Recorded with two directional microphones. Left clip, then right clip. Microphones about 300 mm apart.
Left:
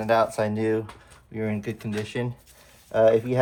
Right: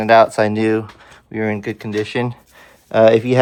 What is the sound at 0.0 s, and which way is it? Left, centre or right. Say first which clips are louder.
Speech: right 11 dB; right.